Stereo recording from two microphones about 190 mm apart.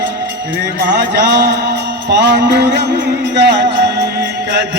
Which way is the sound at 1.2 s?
65° right (ahead or behind).